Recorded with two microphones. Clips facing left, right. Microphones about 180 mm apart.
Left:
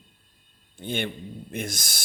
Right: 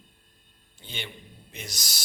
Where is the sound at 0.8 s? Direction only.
55° left (ahead or behind).